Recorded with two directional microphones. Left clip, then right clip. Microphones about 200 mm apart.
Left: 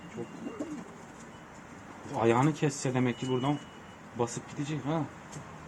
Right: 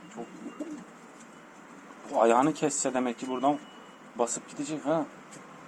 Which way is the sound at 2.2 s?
30° right (ahead or behind).